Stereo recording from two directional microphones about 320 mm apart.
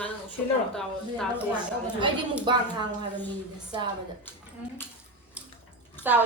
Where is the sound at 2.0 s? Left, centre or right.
Centre.